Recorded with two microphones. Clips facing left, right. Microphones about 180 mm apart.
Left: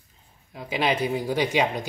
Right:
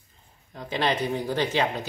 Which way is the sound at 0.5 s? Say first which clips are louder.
Left 1 dB; 10° left (ahead or behind).